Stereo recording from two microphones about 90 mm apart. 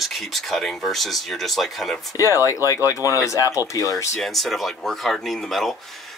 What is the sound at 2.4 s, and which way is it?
Speech, 40° left (ahead or behind).